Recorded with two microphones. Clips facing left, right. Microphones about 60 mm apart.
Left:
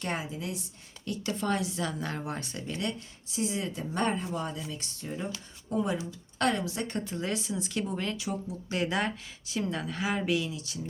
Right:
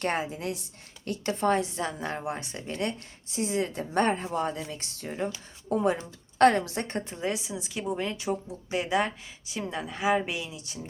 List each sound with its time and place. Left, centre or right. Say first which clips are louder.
0.0 s speech: right 5 dB; right
7.0 s a woman's voice: right 1 dB; right
8.1 s speech: right 4 dB; right
8.7 s a woman's voice: right 3 dB; centre